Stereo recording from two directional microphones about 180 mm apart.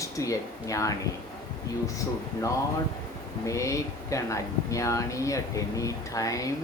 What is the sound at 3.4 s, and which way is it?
Speech, 15° left (ahead or behind).